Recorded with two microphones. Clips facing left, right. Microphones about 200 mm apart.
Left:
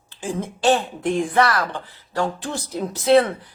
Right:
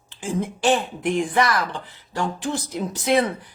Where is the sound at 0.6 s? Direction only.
15° right (ahead or behind).